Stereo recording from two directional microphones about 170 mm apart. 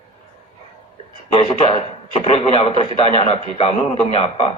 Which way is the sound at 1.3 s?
30° left (ahead or behind).